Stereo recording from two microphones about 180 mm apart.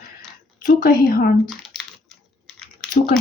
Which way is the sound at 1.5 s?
Centre (ahead or behind).